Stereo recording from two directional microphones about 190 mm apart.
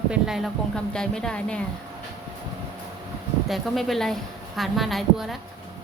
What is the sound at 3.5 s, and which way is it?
A woman's voice, centre (ahead or behind).